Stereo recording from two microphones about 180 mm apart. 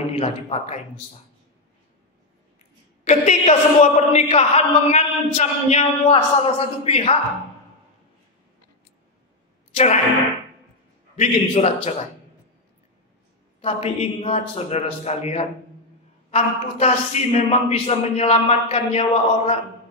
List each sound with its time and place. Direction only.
0.2 s speech: 35° left (ahead or behind)
3.1 s speech: 40° left (ahead or behind)
11.1 s speech: 35° left (ahead or behind)
13.6 s speech: 35° left (ahead or behind)